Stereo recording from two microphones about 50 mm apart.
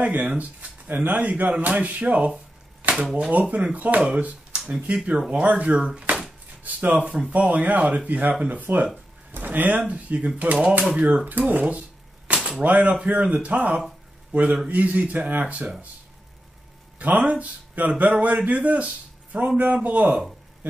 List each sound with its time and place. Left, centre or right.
0.0 s speech: right
12.4 s cap gun: centre
12.6 s a man's voice: right
17.0 s speech: right